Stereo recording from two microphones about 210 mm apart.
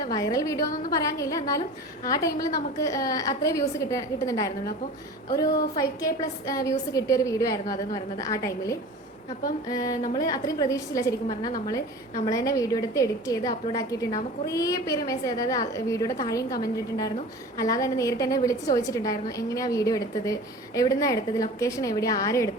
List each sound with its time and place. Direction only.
0.0 s a woman's voice: 15° left (ahead or behind)
12.2 s a woman's voice: 15° left (ahead or behind)